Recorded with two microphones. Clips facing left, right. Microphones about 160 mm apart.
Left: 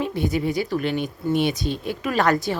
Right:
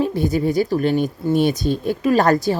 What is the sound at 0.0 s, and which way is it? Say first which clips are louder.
Speech: right 4 dB; 40° right (ahead or behind).